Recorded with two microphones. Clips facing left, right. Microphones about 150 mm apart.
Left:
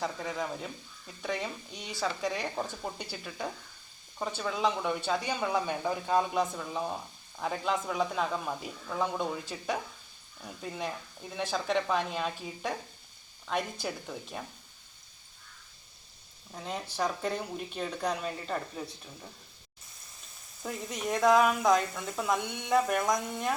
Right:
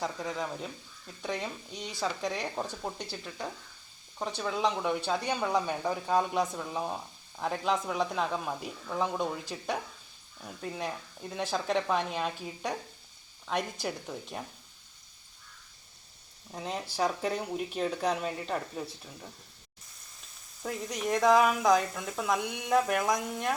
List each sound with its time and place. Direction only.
0.0 s speech: centre (ahead or behind)
16.5 s speech: 10° right (ahead or behind)
20.6 s speech: centre (ahead or behind)